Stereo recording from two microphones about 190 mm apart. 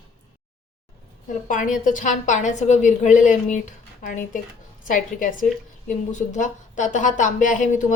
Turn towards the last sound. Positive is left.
turn(degrees=40)  # may be behind; listen again after turning